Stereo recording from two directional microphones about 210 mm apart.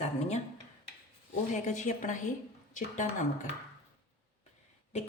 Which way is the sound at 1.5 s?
35° left (ahead or behind).